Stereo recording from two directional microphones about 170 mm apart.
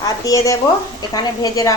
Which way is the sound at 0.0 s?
20° left (ahead or behind).